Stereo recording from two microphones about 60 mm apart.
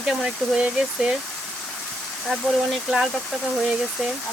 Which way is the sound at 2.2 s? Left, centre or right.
Centre.